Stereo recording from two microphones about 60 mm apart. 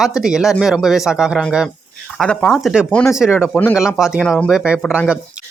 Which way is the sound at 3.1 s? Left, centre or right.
Centre.